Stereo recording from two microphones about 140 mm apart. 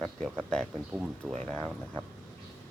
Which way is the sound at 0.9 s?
10° right (ahead or behind).